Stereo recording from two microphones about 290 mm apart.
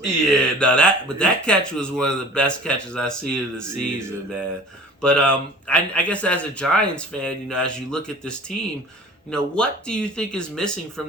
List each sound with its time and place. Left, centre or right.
0.0 s speech: centre
5.0 s speech: centre